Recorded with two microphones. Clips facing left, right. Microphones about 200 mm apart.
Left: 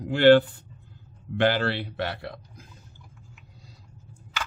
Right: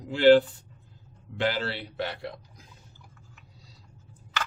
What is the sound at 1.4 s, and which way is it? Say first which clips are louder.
Speech: left 5 dB; 60° left (ahead or behind).